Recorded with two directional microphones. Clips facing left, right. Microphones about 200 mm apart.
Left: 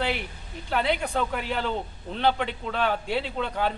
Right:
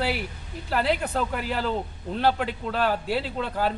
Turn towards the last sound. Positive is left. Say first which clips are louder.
# right 1 dB
turn(degrees=0)  # may be behind; listen again after turning